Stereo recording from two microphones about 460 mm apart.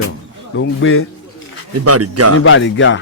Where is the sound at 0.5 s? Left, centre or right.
Left.